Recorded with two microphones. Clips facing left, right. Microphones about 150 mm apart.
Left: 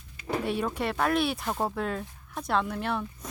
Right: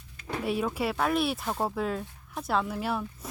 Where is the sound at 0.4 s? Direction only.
5° right (ahead or behind).